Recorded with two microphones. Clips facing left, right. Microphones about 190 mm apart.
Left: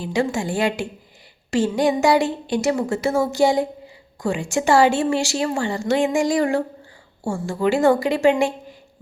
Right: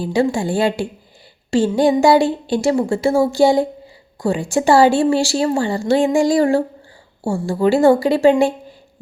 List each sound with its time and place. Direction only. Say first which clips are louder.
0.0 s speech: right 5 dB; 30° right (ahead or behind)